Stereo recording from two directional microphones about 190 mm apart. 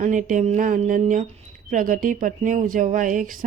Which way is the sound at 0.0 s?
40° right (ahead or behind).